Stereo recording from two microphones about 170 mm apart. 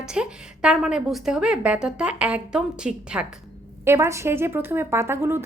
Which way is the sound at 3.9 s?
15° right (ahead or behind).